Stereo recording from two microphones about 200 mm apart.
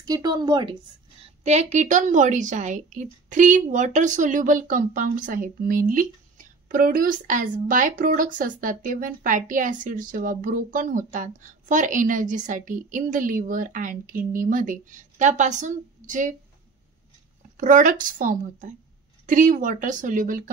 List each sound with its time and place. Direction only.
0.0 s speech: 20° right (ahead or behind)
1.4 s a woman's voice: 35° right (ahead or behind)
17.6 s a woman's voice: 40° right (ahead or behind)